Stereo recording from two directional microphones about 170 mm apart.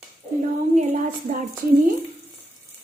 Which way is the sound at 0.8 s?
50° right (ahead or behind).